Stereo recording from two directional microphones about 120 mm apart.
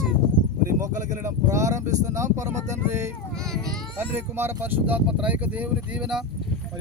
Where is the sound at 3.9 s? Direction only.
20° right (ahead or behind).